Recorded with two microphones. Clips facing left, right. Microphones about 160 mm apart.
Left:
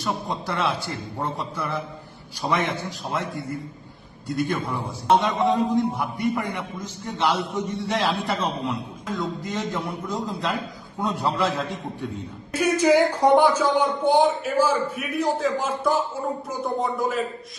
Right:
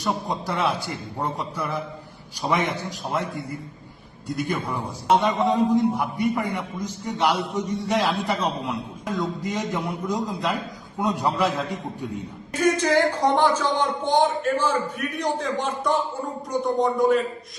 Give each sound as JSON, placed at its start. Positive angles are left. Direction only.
{"t": 0.0, "sound": "a man's voice", "side_deg": 0}
{"t": 4.3, "sound": "a man's voice", "side_deg": 0}
{"t": 11.4, "sound": "a man's voice", "side_deg": 0}